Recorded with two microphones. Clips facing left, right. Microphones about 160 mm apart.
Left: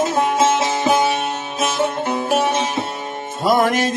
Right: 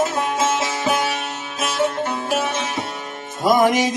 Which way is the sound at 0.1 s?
25° left (ahead or behind).